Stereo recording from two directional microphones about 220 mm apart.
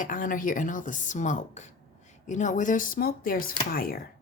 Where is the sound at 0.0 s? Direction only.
35° left (ahead or behind).